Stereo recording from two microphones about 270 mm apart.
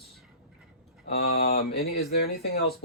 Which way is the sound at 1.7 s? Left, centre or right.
Left.